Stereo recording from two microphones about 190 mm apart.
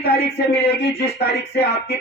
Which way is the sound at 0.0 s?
60° left (ahead or behind).